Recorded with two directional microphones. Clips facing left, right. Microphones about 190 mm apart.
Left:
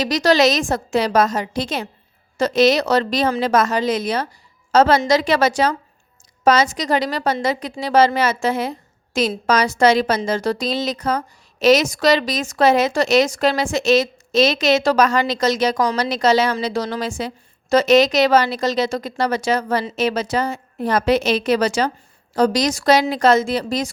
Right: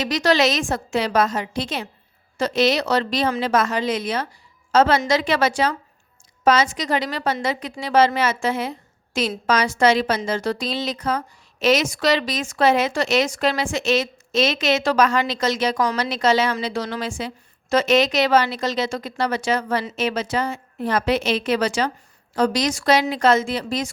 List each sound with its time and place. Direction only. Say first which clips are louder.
0.0 s speech: left 3 dB; 40° left (ahead or behind)